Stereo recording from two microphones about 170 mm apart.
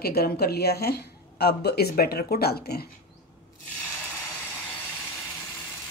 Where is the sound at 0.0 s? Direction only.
65° left (ahead or behind).